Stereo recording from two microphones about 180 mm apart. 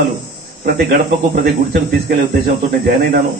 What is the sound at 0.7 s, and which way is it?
Speech, 50° right (ahead or behind).